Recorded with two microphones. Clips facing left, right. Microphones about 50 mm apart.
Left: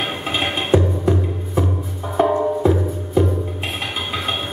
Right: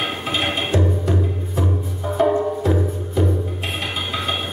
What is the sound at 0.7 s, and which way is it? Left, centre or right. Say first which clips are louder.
Music: left 6 dB; left.